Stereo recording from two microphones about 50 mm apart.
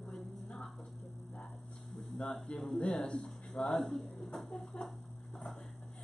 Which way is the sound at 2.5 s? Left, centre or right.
Centre.